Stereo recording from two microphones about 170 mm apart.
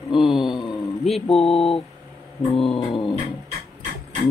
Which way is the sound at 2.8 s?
25° left (ahead or behind).